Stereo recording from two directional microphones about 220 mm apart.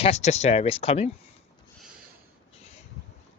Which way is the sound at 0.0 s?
30° left (ahead or behind).